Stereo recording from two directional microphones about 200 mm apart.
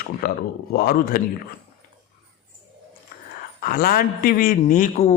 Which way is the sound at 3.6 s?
45° left (ahead or behind).